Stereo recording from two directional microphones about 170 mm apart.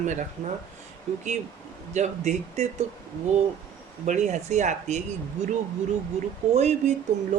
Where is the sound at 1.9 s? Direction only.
45° right (ahead or behind).